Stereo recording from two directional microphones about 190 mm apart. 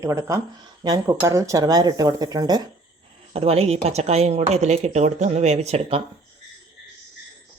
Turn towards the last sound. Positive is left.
turn(degrees=-30)  # may be behind; listen again after turning